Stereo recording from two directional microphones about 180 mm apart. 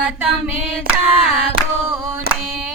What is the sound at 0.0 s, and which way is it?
Female singing, 5° right (ahead or behind).